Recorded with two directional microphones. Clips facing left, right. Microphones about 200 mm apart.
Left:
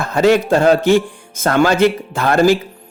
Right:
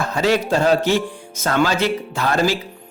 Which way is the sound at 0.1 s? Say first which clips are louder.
Left 7 dB; 55° left (ahead or behind).